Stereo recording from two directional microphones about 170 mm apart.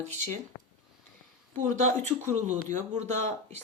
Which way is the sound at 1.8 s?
45° right (ahead or behind).